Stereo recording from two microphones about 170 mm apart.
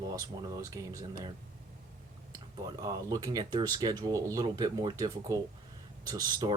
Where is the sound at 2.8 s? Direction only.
20° right (ahead or behind).